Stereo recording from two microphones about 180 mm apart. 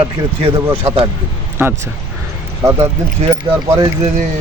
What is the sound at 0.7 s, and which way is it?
Speech, 30° right (ahead or behind).